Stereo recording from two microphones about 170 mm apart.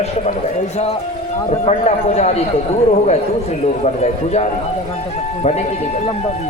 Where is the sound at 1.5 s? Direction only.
40° left (ahead or behind).